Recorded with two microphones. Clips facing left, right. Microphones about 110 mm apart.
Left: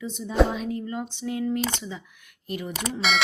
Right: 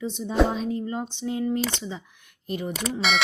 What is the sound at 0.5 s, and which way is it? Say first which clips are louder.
Speech: right 2 dB; 30° right (ahead or behind).